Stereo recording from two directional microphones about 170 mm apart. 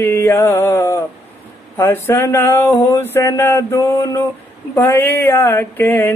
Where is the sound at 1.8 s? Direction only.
15° left (ahead or behind).